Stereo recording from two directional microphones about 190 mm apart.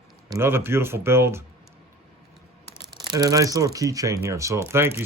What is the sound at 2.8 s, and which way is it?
Speech, 20° right (ahead or behind).